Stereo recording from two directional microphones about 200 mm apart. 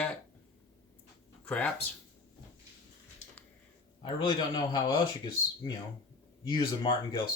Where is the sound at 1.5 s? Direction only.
5° left (ahead or behind).